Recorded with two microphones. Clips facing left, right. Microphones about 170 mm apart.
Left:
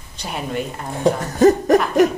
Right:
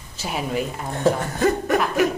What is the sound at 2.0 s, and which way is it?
Hoot, 40° left (ahead or behind).